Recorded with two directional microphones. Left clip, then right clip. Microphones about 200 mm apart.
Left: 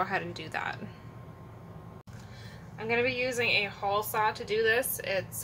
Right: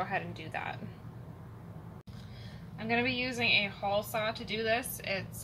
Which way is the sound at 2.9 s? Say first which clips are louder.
Left 3 dB; 40° left (ahead or behind).